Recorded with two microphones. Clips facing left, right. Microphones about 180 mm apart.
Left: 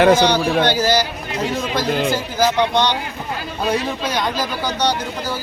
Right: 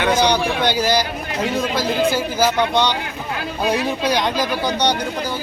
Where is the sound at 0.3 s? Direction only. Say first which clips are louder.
Left 2 dB; 15° right (ahead or behind).